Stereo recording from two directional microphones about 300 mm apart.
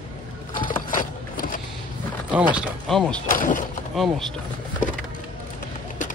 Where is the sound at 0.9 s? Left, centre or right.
Left.